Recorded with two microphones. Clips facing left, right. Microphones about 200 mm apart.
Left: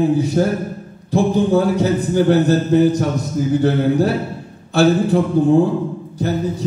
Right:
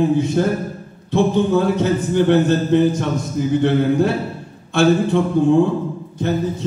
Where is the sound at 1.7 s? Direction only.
35° left (ahead or behind).